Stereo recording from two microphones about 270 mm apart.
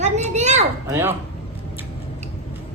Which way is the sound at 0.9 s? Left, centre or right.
Centre.